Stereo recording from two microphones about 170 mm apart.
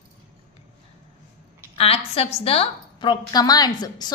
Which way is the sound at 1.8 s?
35° left (ahead or behind).